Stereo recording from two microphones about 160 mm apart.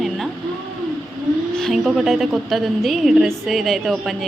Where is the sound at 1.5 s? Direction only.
Centre (ahead or behind).